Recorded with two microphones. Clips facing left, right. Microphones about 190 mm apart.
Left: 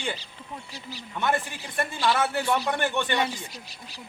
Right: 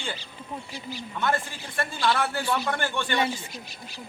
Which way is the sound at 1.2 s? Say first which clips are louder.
Left 1 dB; 15° left (ahead or behind).